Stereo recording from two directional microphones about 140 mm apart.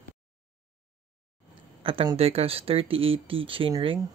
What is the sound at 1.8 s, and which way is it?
Speech, 40° right (ahead or behind).